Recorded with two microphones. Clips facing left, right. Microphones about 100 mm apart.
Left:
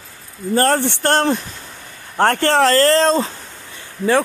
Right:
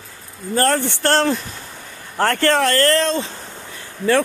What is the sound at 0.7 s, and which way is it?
Speech, 20° left (ahead or behind).